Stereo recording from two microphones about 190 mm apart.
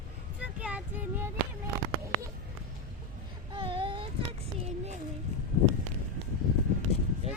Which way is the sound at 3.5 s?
25° right (ahead or behind).